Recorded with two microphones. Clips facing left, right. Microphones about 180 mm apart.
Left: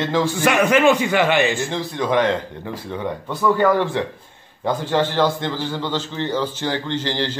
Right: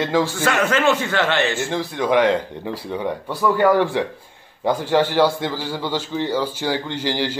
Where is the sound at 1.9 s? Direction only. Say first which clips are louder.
Right 2 dB; 15° right (ahead or behind).